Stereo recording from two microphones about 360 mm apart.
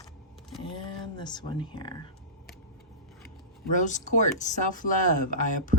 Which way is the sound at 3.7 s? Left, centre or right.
Left.